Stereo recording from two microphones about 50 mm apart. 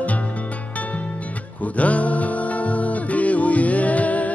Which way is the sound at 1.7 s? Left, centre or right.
Left.